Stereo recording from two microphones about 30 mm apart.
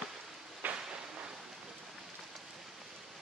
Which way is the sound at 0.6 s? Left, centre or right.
Right.